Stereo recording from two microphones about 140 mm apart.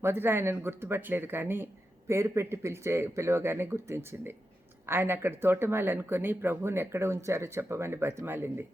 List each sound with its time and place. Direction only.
0.0 s speech: 15° right (ahead or behind)